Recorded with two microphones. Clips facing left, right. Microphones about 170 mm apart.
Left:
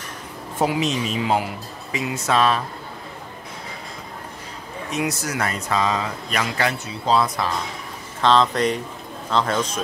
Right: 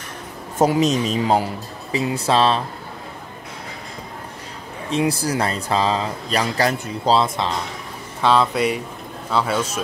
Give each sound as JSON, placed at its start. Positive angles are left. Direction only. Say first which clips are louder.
{"t": 0.6, "sound": "speech", "louder": "right 5 dB", "side_deg": -40}
{"t": 4.9, "sound": "speech", "louder": "right 5 dB", "side_deg": -30}
{"t": 7.2, "sound": "speech", "louder": "right 1 dB", "side_deg": -25}
{"t": 8.2, "sound": "speech", "louder": "even", "side_deg": -10}